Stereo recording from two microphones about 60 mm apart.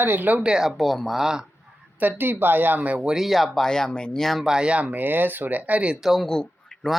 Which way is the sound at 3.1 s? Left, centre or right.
Centre.